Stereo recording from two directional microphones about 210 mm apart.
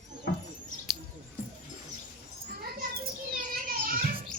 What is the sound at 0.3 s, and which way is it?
Rodents, 50° left (ahead or behind).